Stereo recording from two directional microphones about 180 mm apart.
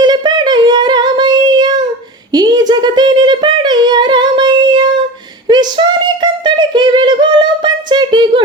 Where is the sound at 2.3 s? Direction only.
20° right (ahead or behind).